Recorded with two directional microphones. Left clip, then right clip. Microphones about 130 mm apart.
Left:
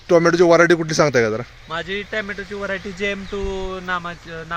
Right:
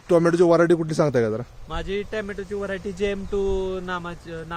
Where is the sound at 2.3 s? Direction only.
25° right (ahead or behind).